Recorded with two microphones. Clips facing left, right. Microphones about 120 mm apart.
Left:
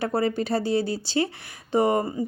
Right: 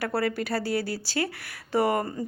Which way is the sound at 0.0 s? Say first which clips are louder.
Left 3 dB; 25° left (ahead or behind).